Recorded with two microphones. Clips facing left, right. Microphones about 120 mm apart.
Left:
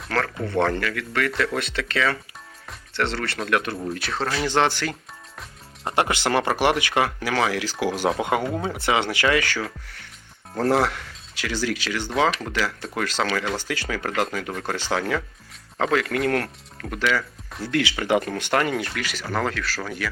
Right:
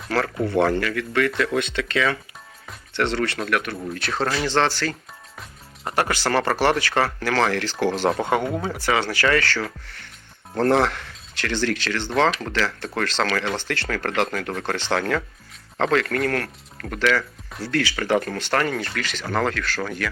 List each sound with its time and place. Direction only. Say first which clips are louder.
0.1 s speech: right 3 dB; 10° right (ahead or behind)
3.5 s speech: left 1 dB; 25° left (ahead or behind)
3.9 s speech: right 2 dB; centre (ahead or behind)
4.4 s speech: left 2 dB; 15° left (ahead or behind)
8.6 s speech: even; 20° left (ahead or behind); by 16.2 s 5° left (ahead or behind)
16.2 s speech: left 1 dB; 25° left (ahead or behind)
16.8 s speech: right 2 dB; 10° left (ahead or behind)